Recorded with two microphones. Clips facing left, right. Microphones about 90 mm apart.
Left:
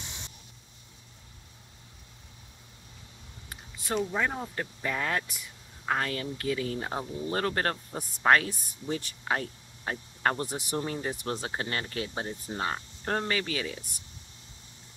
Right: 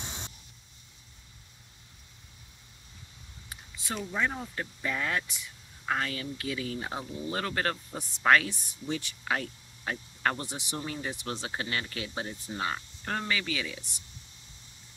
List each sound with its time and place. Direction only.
0.0 s vehicle: 55° right (ahead or behind)
3.4 s a sound: 50° left (ahead or behind)
4.2 s speech: 25° left (ahead or behind)
4.6 s speech: 40° left (ahead or behind)
10.5 s speech: 45° left (ahead or behind)